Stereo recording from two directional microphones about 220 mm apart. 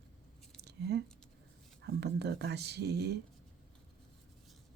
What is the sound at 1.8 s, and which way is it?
Speech, 50° right (ahead or behind).